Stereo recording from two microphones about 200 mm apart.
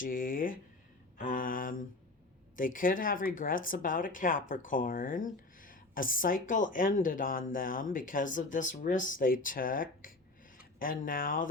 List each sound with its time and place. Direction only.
0.0 s speech: 45° left (ahead or behind)
1.2 s a sound: 45° left (ahead or behind)
2.6 s speech: 40° left (ahead or behind)